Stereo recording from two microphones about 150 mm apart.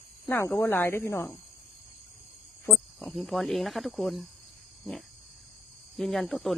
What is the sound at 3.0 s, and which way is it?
Speech, centre (ahead or behind).